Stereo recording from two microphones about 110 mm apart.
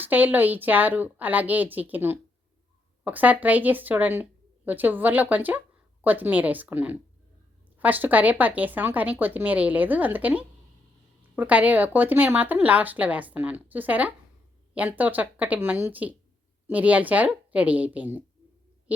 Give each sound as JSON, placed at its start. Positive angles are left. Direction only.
{"t": 0.0, "sound": "speech", "side_deg": -15}
{"t": 18.9, "sound": "owl", "side_deg": -15}